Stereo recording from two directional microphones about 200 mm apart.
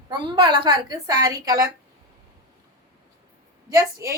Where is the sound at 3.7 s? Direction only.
15° right (ahead or behind).